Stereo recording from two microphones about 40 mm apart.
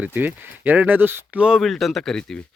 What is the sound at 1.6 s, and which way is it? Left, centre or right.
Speech, centre.